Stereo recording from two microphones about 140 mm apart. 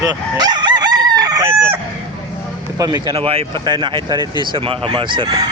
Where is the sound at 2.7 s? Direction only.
25° right (ahead or behind).